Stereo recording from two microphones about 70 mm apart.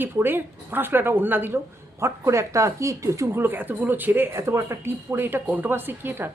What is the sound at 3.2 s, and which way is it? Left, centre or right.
Speech, right.